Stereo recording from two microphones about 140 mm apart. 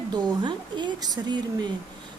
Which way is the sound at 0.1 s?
30° right (ahead or behind).